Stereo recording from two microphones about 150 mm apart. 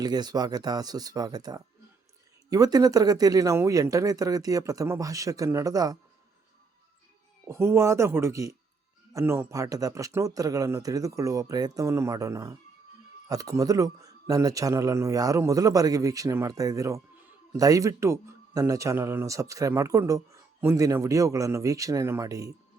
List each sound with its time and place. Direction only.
0.0 s speech: 25° right (ahead or behind)
7.4 s speech: 15° right (ahead or behind)